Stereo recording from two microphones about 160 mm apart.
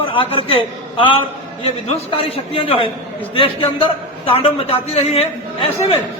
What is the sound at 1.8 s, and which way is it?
A man's voice, 40° left (ahead or behind).